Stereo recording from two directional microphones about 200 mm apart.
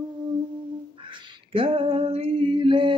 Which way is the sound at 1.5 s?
25° right (ahead or behind).